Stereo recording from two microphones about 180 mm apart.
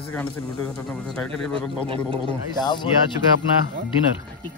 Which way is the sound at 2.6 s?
25° left (ahead or behind).